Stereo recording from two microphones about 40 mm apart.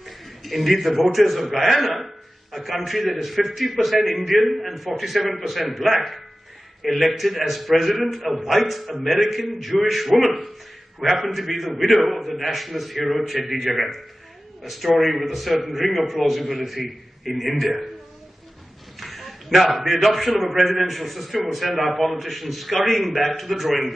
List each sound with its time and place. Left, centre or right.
0.0 s a man's voice: centre
18.9 s a man's voice: centre